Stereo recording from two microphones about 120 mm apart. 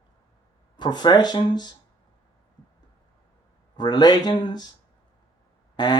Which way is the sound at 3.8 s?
35° left (ahead or behind).